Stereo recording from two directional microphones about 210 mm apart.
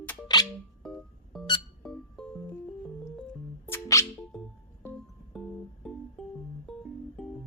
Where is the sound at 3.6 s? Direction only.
15° left (ahead or behind).